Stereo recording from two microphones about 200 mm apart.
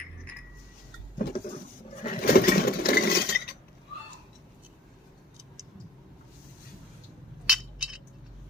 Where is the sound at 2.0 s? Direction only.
45° left (ahead or behind).